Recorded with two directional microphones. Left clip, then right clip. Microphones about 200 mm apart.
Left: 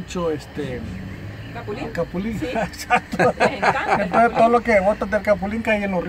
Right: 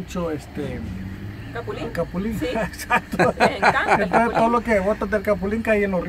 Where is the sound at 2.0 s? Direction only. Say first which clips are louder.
Even; 5° right (ahead or behind).